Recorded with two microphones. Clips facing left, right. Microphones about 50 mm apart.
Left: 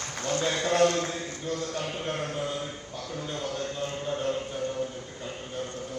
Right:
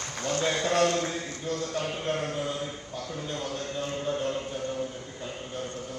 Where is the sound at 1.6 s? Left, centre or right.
Right.